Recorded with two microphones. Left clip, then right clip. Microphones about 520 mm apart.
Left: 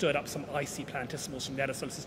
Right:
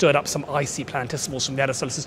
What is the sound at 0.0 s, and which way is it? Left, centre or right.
Speech, right.